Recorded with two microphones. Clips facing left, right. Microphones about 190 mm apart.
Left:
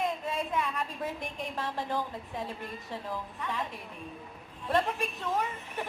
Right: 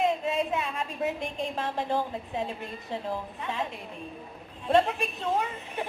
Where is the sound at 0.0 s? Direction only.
25° right (ahead or behind).